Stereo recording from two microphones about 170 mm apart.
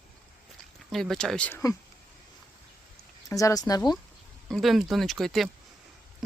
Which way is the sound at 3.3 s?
20° left (ahead or behind).